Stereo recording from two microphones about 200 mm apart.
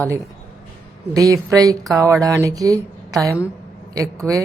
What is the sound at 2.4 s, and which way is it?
Speech, 15° right (ahead or behind).